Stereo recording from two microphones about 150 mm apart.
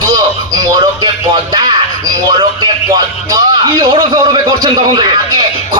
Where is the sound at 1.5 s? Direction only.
25° right (ahead or behind).